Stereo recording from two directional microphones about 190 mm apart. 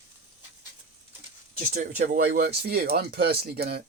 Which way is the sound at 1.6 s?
40° right (ahead or behind).